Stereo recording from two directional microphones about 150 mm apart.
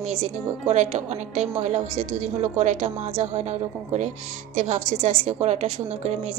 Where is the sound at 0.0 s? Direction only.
50° right (ahead or behind).